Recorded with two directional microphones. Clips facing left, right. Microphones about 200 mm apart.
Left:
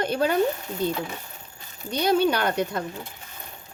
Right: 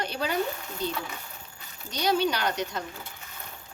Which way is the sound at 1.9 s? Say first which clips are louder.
Left 5 dB; 55° left (ahead or behind).